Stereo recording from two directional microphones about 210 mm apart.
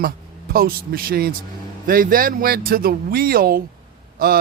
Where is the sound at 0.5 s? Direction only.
45° right (ahead or behind).